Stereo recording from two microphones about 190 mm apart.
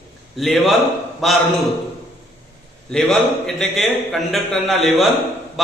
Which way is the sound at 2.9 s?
5° left (ahead or behind).